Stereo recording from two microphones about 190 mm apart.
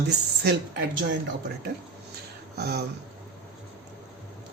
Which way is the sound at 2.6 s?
55° right (ahead or behind).